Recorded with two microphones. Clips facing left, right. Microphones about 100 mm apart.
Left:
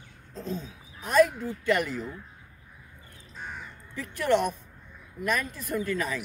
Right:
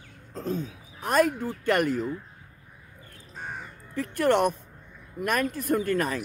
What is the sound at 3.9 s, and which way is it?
Speech, 50° right (ahead or behind).